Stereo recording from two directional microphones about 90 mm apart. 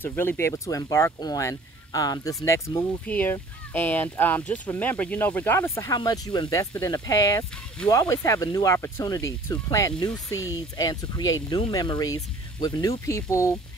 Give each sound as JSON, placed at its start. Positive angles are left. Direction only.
{"t": 0.0, "sound": "speech", "side_deg": 25}
{"t": 0.7, "sound": "speech", "side_deg": 40}
{"t": 3.1, "sound": "speech", "side_deg": 20}
{"t": 5.9, "sound": "speech", "side_deg": 45}
{"t": 9.0, "sound": "speech", "side_deg": 40}
{"t": 9.9, "sound": "speech", "side_deg": 50}
{"t": 13.0, "sound": "speech", "side_deg": 35}